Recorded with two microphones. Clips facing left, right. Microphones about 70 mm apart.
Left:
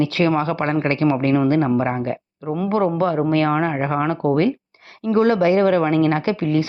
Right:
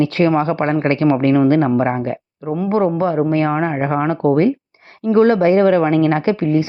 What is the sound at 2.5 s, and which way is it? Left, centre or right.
Speech, centre.